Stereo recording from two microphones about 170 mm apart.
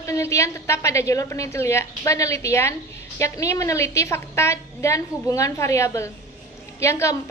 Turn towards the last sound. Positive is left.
turn(degrees=15)  # may be behind; listen again after turning